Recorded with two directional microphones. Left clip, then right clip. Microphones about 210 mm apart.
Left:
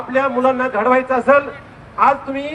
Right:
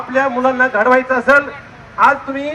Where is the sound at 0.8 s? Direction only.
50° left (ahead or behind).